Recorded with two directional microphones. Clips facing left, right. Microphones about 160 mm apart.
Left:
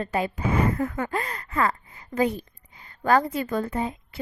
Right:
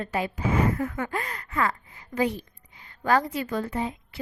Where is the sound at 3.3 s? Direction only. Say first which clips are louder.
Left 2 dB; 50° left (ahead or behind).